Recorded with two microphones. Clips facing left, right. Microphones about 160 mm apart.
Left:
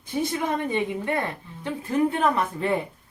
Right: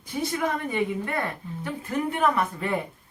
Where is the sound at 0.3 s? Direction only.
25° left (ahead or behind).